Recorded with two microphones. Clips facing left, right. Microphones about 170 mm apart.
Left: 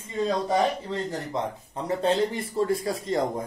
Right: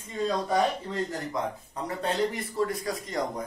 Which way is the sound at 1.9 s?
25° left (ahead or behind).